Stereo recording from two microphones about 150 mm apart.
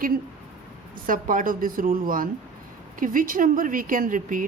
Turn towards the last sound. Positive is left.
turn(degrees=-65)  # may be behind; listen again after turning